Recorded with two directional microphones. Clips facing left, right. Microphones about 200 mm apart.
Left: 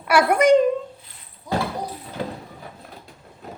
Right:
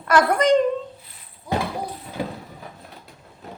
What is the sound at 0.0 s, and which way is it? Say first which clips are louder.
Speech: left 1 dB; 10° left (ahead or behind).